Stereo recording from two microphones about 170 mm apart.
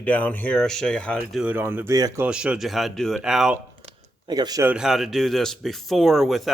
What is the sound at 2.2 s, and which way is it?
Speech, 5° right (ahead or behind).